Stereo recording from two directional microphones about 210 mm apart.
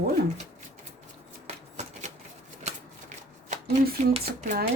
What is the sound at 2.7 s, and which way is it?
Shuffling cards, 35° right (ahead or behind).